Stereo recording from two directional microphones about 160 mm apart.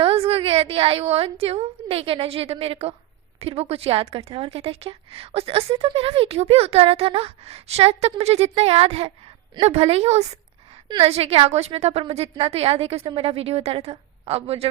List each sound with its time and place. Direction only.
0.0 s a woman's voice: 35° right (ahead or behind)